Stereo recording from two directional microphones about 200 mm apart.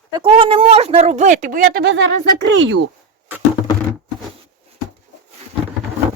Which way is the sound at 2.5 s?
75° right (ahead or behind).